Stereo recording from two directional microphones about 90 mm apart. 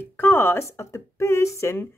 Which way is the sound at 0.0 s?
25° left (ahead or behind).